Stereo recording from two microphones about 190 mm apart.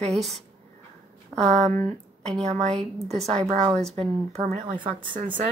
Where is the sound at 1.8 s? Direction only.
5° left (ahead or behind).